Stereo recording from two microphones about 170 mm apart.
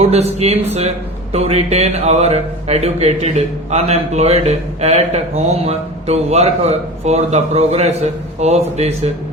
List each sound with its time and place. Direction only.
0.0 s speech: 40° right (ahead or behind)